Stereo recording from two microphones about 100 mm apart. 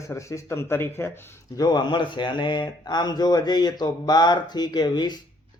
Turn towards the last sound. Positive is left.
turn(degrees=45)  # may be behind; listen again after turning